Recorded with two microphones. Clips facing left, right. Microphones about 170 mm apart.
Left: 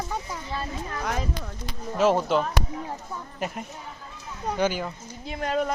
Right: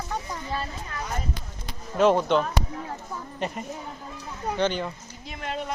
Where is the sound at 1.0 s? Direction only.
85° left.